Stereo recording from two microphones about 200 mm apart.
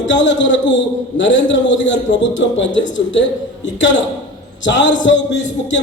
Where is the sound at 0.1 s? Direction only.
65° left (ahead or behind).